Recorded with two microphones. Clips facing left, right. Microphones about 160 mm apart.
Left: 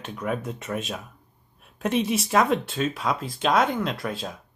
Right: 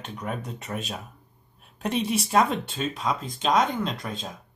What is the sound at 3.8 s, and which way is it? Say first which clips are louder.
Speech: left 2 dB; 5° left (ahead or behind).